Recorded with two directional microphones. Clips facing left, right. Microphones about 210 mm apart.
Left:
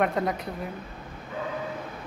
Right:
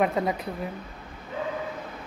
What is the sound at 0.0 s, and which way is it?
Speech, 5° right (ahead or behind).